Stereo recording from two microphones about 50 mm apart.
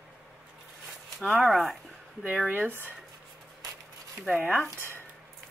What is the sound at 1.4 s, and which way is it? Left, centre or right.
Speech, centre.